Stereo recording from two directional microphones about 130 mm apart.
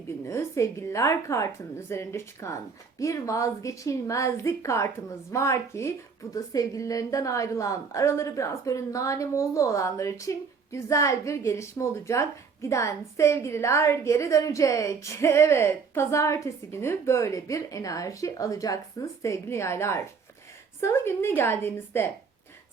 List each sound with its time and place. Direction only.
0.3 s a woman's voice: 20° left (ahead or behind)